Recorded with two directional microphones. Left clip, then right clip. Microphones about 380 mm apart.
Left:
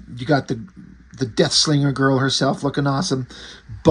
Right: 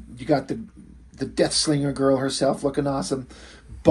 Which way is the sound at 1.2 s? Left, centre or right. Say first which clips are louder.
Left 4 dB; left.